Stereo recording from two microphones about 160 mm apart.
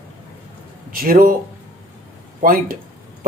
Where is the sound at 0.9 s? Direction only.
65° right (ahead or behind).